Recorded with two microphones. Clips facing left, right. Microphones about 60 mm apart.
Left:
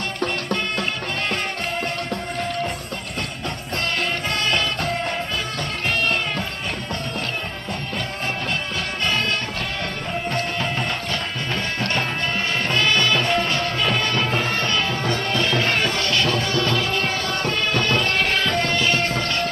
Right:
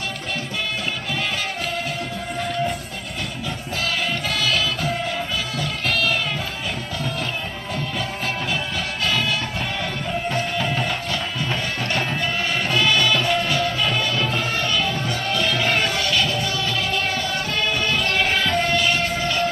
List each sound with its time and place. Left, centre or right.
4.5 s music: centre
10.6 s music: centre
12.6 s music: centre
14.4 s music: left
15.4 s music: centre